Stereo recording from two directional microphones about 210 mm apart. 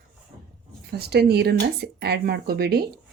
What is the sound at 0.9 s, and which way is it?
Speech, 50° right (ahead or behind).